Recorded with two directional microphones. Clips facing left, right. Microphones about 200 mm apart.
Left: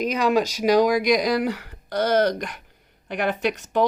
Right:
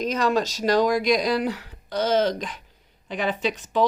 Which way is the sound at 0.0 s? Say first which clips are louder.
Left 2 dB; 10° left (ahead or behind).